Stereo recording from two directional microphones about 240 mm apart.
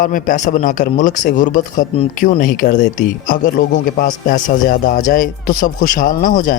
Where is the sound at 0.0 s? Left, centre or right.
Left.